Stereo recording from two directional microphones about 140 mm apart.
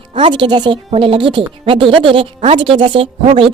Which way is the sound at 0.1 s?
35° right (ahead or behind).